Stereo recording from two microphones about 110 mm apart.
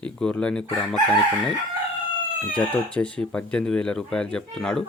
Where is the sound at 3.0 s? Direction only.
10° left (ahead or behind).